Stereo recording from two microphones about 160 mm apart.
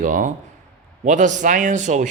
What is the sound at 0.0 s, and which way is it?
Speech, 55° right (ahead or behind).